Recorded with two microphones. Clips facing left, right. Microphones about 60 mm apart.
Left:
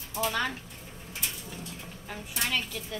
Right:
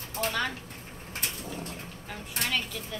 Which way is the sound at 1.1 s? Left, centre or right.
Right.